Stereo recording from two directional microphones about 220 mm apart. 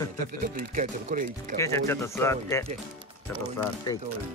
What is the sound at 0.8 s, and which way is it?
Speech, 35° right (ahead or behind).